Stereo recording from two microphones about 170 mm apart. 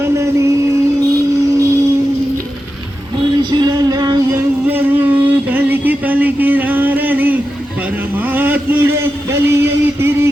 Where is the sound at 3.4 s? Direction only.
25° right (ahead or behind).